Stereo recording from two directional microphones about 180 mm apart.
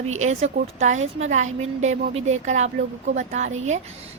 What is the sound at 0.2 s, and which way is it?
A woman's voice, 40° right (ahead or behind).